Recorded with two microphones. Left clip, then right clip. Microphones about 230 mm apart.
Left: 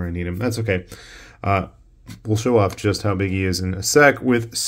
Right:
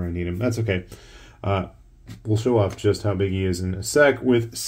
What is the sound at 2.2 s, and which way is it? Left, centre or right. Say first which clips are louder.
Speech: left 3 dB; left.